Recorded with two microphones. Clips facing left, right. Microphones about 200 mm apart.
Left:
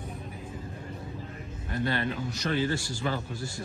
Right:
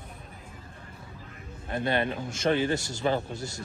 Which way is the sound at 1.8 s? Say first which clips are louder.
Right 3 dB; 20° right (ahead or behind).